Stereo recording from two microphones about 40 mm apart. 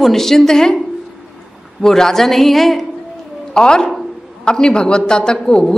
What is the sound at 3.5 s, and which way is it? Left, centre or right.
A woman's voice, centre.